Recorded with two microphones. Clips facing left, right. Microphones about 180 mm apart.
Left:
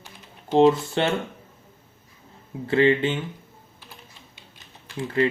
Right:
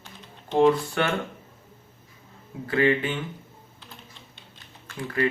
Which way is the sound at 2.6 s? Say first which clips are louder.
Left 3 dB; 25° left (ahead or behind).